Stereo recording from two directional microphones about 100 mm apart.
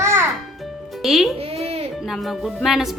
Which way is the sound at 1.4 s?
85° right.